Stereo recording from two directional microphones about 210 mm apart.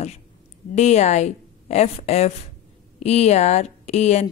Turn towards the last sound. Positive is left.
turn(degrees=30)  # may be behind; listen again after turning